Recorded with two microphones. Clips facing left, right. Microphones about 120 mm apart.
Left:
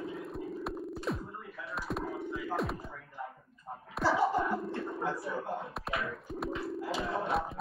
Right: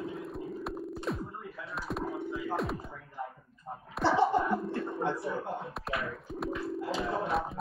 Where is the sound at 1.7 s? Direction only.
Centre (ahead or behind).